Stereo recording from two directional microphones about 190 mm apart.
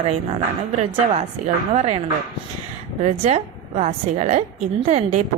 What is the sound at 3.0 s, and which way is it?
A woman's voice, 35° right (ahead or behind).